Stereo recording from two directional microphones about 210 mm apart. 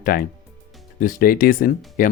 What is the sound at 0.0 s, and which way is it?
Speech, 45° left (ahead or behind).